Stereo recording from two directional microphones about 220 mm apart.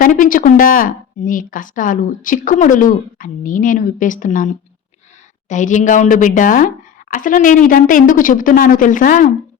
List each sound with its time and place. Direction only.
0.0 s a woman's voice: 35° left (ahead or behind)